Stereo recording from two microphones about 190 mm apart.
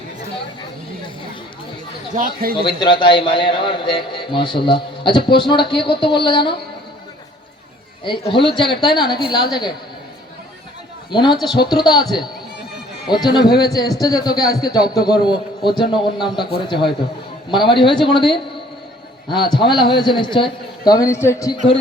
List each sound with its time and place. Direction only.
2.1 s speech: 50° right (ahead or behind)
2.6 s a man's voice: 25° left (ahead or behind)
8.0 s a man's voice: 25° left (ahead or behind)
11.1 s a man's voice: 25° left (ahead or behind)